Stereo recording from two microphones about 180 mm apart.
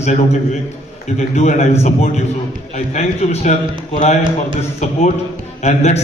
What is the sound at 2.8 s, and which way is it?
A man's voice, 40° left (ahead or behind).